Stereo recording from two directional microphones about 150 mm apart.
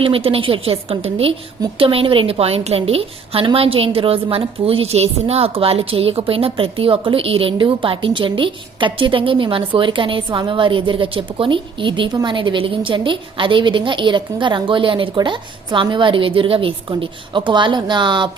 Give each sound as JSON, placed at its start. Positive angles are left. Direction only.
{"t": 0.0, "sound": "a woman's voice", "side_deg": -40}